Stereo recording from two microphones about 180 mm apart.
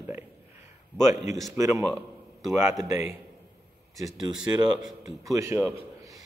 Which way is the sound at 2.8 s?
15° right (ahead or behind).